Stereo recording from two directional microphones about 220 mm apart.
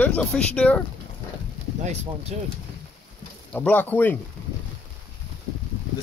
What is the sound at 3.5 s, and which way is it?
Speech, 5° left (ahead or behind).